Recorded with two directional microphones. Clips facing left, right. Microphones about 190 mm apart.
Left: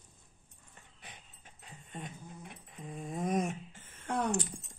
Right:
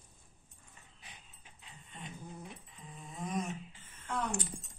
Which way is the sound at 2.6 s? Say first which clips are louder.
Left 9 dB; 55° left (ahead or behind).